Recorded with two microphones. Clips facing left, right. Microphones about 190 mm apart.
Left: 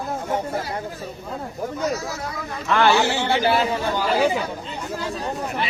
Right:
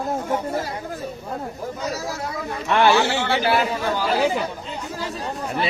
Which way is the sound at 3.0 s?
20° left (ahead or behind).